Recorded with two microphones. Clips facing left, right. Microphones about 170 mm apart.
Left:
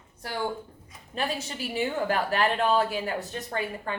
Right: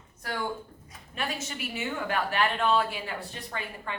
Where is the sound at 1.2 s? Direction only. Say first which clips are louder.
Left 3 dB; 35° left (ahead or behind).